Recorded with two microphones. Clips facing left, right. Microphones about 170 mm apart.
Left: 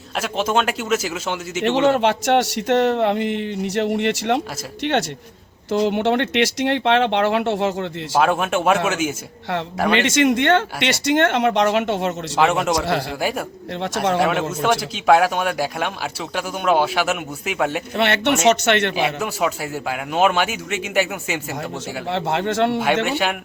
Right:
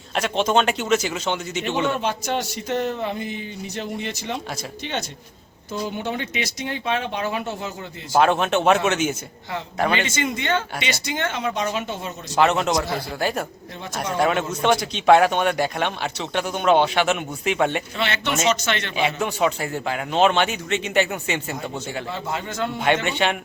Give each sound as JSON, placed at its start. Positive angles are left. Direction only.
{"t": 0.2, "sound": "a man's voice", "side_deg": 5}
{"t": 1.6, "sound": "speech", "side_deg": 80}
{"t": 8.2, "sound": "a man's voice", "side_deg": 5}
{"t": 9.9, "sound": "speech", "side_deg": 75}
{"t": 12.4, "sound": "a man's voice", "side_deg": 10}
{"t": 13.8, "sound": "speech", "side_deg": 80}
{"t": 14.2, "sound": "a man's voice", "side_deg": 5}
{"t": 17.9, "sound": "speech", "side_deg": 60}
{"t": 19.0, "sound": "a man's voice", "side_deg": 5}
{"t": 22.1, "sound": "speech", "side_deg": 75}
{"t": 23.0, "sound": "a man's voice", "side_deg": 5}